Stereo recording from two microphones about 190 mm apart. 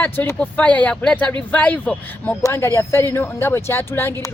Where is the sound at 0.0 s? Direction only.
10° left (ahead or behind).